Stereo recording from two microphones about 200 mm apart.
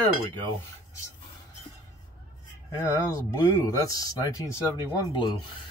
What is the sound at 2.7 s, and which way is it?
Speech, 10° left (ahead or behind).